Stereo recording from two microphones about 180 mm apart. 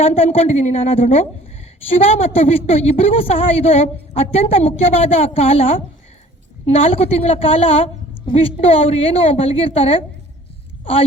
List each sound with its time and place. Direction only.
0.0 s a woman's voice: 35° left (ahead or behind)